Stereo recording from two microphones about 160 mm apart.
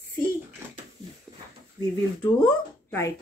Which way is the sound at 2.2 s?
10° left (ahead or behind).